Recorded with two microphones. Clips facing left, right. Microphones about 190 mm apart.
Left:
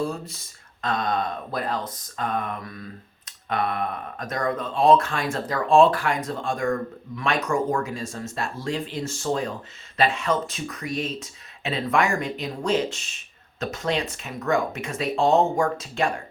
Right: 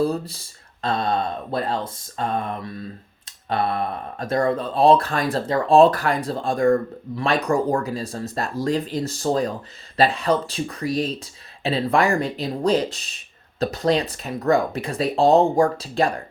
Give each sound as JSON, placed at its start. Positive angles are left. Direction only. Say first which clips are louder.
{"t": 0.0, "sound": "speech", "louder": "right 6 dB", "side_deg": -35}